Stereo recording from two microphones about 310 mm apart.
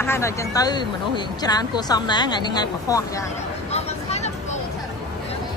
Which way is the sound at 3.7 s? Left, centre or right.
Centre.